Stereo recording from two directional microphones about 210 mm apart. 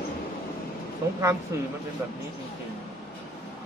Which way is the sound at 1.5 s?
15° right (ahead or behind).